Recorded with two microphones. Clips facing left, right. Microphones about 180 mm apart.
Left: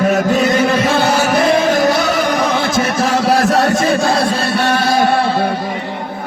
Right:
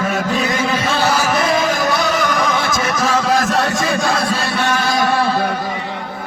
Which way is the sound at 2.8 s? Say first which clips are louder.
Left 3 dB; 60° left (ahead or behind).